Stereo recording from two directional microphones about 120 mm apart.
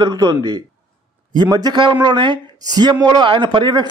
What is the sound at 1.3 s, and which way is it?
Speech, 35° right (ahead or behind).